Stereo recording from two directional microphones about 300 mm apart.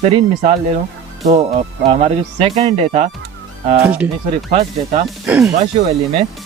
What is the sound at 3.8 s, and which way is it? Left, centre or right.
Speech, centre.